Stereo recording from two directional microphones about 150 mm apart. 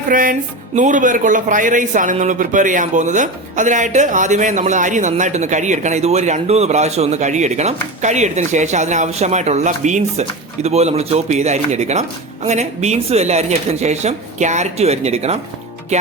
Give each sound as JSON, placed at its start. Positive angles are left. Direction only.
{"t": 0.1, "sound": "music", "side_deg": -65}
{"t": 0.8, "sound": "speech", "side_deg": -60}